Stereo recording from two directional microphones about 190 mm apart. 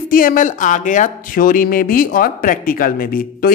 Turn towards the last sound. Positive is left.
turn(degrees=45)  # may be behind; listen again after turning